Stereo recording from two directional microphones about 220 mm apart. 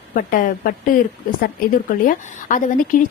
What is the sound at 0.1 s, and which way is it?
Speech, 40° left (ahead or behind).